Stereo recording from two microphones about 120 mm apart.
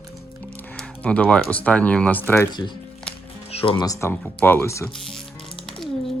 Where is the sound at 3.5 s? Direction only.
50° left (ahead or behind).